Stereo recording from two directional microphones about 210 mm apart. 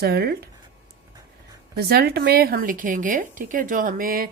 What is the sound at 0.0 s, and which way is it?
Speech, 50° right (ahead or behind).